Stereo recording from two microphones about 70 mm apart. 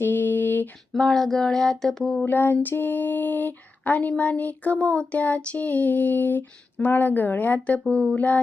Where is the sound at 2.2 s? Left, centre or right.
Left.